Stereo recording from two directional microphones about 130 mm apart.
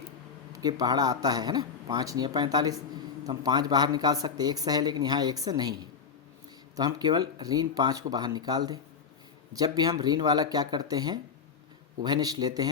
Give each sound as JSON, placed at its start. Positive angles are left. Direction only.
{"t": 0.5, "sound": "speech", "side_deg": -30}
{"t": 6.7, "sound": "speech", "side_deg": -30}